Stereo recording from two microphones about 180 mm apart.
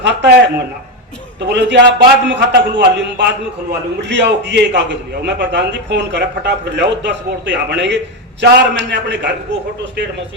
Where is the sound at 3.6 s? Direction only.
70° right (ahead or behind).